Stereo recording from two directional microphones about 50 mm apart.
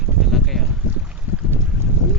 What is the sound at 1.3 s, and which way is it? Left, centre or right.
Boat, right.